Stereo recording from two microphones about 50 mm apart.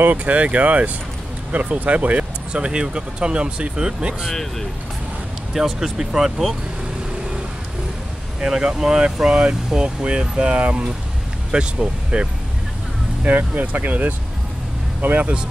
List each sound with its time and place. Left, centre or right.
0.0 s speech: right; by 4.3 s centre
4.3 s speech: centre
5.5 s speech: centre
8.4 s speech: centre
13.2 s speech: right